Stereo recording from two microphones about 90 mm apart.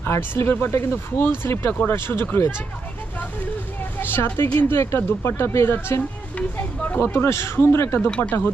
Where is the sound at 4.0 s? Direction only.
25° left (ahead or behind).